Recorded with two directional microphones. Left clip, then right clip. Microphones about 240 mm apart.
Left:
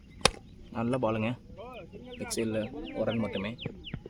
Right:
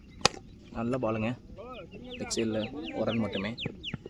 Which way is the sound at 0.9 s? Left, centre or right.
Centre.